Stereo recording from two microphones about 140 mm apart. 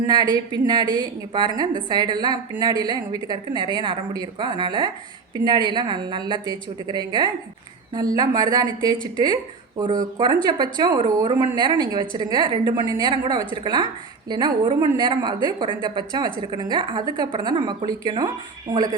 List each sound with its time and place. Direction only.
0.1 s a woman's voice: 30° right (ahead or behind)